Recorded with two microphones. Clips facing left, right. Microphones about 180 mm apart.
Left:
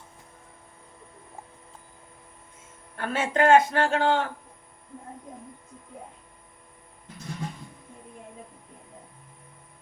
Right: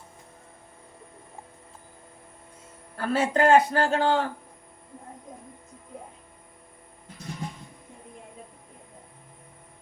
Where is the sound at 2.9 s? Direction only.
35° right (ahead or behind).